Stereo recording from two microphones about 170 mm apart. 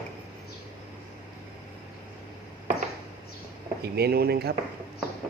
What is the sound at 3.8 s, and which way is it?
Speech, 70° right (ahead or behind).